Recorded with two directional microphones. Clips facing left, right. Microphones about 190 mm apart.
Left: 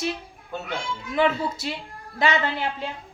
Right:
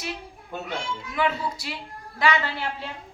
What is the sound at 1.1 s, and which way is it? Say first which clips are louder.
A woman's voice: left 4 dB; 25° left (ahead or behind).